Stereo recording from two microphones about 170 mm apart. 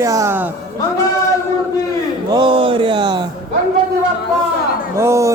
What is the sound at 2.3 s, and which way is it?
Speech, 30° right (ahead or behind).